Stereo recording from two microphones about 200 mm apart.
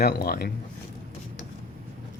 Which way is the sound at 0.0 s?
50° left (ahead or behind).